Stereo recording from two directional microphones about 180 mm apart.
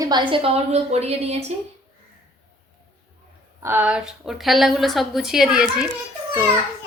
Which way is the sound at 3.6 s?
10° right (ahead or behind).